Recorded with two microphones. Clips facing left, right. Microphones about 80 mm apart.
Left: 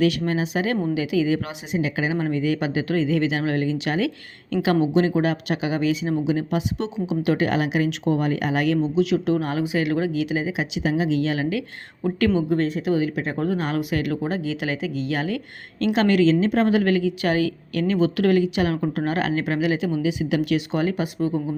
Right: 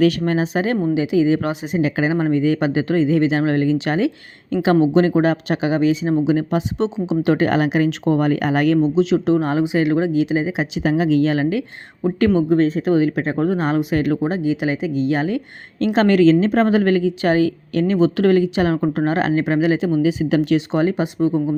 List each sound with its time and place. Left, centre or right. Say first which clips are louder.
0.0 s speech: right 4 dB; right
4.4 s speech: right 4 dB; centre
4.7 s speech: right 5 dB; right